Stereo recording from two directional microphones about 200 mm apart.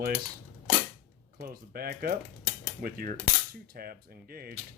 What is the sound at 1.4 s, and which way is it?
Speech, 50° right (ahead or behind).